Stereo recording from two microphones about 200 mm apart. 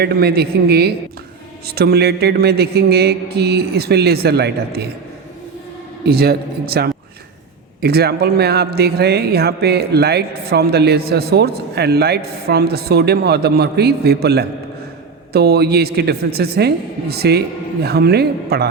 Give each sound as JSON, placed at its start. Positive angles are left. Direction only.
{"t": 0.0, "sound": "a man's voice", "side_deg": -50}
{"t": 6.1, "sound": "a man's voice", "side_deg": -50}